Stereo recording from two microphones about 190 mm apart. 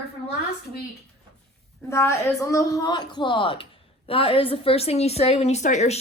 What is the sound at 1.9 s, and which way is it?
A woman's voice, 15° left (ahead or behind).